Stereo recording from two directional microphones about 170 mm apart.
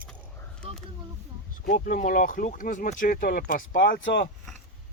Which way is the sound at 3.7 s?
85° left.